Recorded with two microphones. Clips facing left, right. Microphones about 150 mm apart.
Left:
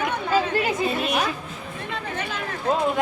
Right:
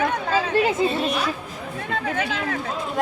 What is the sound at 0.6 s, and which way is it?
Speech, 30° right (ahead or behind).